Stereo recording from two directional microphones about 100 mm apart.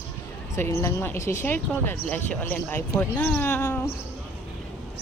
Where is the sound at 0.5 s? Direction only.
30° left (ahead or behind).